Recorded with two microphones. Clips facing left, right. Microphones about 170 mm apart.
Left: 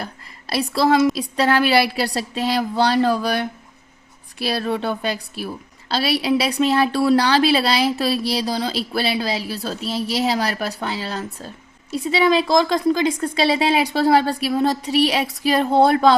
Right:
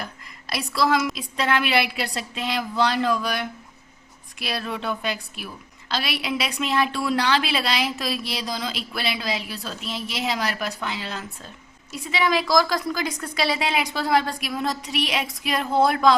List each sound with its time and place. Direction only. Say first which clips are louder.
0.5 s a woman's voice: left 5 dB; 30° left (ahead or behind)